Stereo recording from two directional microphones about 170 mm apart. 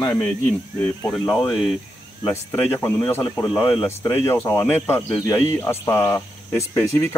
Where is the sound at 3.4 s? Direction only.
30° left (ahead or behind).